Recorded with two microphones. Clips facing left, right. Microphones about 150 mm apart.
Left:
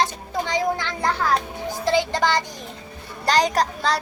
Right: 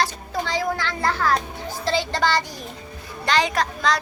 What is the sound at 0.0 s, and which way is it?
Children playing, 20° left (ahead or behind).